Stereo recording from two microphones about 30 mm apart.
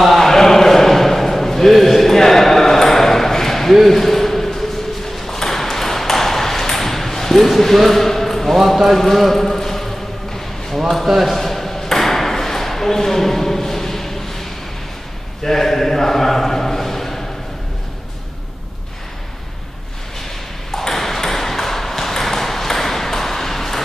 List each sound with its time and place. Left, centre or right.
0.0 s chant: centre
1.7 s a sound: centre
5.2 s ping: centre
8.6 s a man's voice: centre
9.0 s a sound: centre
11.1 s a man's voice: centre
11.3 s ping: centre
15.4 s a sound: centre
20.7 s ping: centre